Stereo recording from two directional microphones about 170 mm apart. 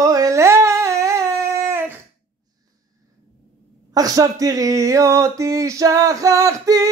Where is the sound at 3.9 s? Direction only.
20° right (ahead or behind).